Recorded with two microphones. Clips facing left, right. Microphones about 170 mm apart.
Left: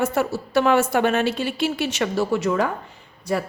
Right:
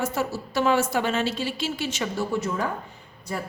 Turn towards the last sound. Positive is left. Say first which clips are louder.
# left 8 dB
turn(degrees=80)